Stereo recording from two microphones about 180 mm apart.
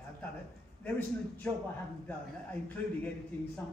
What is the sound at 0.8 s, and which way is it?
Speech, 10° left (ahead or behind).